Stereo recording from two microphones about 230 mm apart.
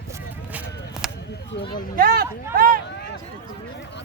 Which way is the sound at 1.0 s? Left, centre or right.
Centre.